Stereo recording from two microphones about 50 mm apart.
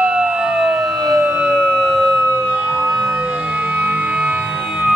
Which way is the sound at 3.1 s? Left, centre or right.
Right.